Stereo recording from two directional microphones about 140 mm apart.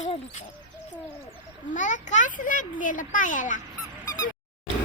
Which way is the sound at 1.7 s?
65° left (ahead or behind).